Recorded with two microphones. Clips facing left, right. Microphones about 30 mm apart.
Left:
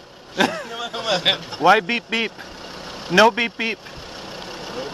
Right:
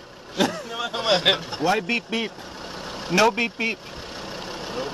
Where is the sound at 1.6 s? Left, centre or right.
Left.